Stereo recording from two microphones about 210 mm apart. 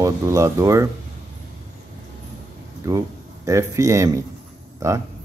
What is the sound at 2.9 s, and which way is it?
Speech, 15° right (ahead or behind).